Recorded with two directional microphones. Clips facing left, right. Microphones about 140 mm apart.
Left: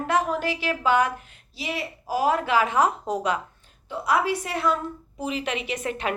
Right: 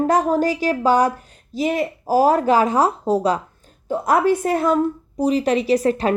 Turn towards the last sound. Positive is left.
turn(degrees=-35)  # may be behind; listen again after turning